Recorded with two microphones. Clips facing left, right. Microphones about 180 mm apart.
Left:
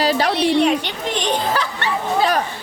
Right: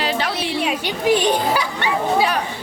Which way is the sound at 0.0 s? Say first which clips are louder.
Left 4 dB; 40° left (ahead or behind).